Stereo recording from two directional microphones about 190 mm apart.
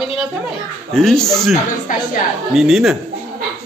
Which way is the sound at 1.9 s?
45° left (ahead or behind).